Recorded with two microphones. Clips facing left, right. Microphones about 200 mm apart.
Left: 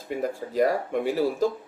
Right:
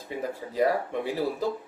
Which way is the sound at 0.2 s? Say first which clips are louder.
Left 2 dB; 45° left (ahead or behind).